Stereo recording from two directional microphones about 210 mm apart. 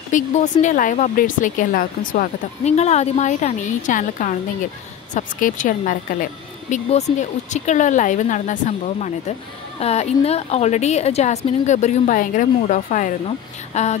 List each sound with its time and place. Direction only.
0.1 s speech: 35° left (ahead or behind)